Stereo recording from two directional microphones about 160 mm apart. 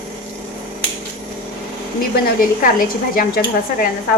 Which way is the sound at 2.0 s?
65° left (ahead or behind).